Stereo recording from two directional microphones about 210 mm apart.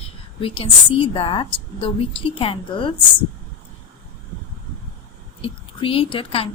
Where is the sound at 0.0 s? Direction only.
25° left (ahead or behind).